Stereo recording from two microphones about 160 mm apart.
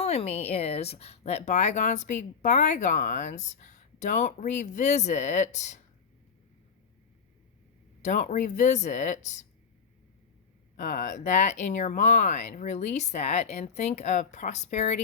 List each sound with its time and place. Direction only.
0.0 s a woman's voice: 40° left (ahead or behind)
8.0 s a woman's voice: 50° left (ahead or behind)
10.8 s a woman's voice: 55° left (ahead or behind)